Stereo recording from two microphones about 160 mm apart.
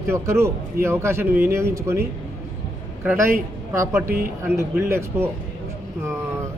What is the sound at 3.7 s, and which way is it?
A man's voice, 15° right (ahead or behind).